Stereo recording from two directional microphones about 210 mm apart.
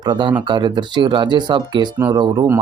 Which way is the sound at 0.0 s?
20° right (ahead or behind).